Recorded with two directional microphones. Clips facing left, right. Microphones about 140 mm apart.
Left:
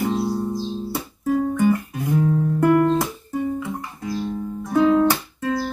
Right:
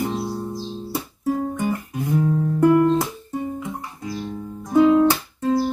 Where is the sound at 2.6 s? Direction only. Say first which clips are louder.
Right 2 dB; 15° right (ahead or behind).